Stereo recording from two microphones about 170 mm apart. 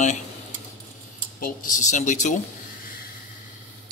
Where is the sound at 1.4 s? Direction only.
50° left (ahead or behind).